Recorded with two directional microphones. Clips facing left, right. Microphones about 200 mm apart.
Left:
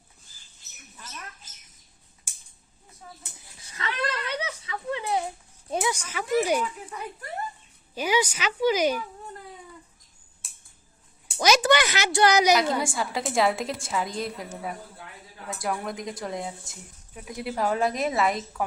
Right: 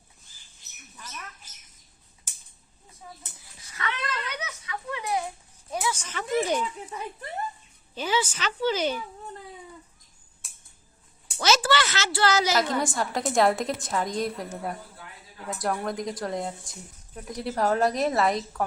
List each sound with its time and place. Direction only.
3.6 s a sound: 25° left (ahead or behind)
5.7 s a woman's voice: 15° left (ahead or behind)
7.9 s a woman's voice: 10° left (ahead or behind)
11.3 s a woman's voice: 15° left (ahead or behind)